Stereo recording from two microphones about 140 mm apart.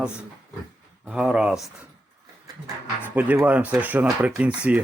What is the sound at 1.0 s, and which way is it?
Speech, 10° right (ahead or behind).